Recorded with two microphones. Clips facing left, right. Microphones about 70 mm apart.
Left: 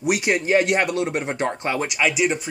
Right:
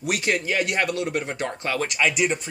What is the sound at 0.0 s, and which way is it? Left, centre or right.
Speech, centre.